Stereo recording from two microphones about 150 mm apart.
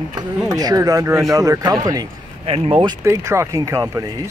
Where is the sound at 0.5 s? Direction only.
25° right (ahead or behind).